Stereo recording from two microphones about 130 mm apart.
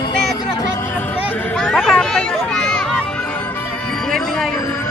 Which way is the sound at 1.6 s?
5° left (ahead or behind).